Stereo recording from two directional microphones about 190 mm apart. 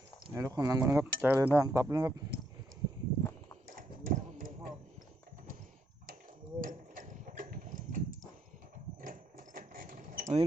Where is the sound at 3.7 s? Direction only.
45° right (ahead or behind).